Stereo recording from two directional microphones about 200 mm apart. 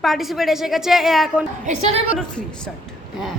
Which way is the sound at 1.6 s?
35° right (ahead or behind).